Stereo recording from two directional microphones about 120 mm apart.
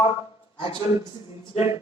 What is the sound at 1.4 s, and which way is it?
Speech, 55° left (ahead or behind).